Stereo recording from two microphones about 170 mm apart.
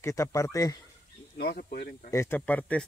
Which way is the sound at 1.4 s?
65° left (ahead or behind).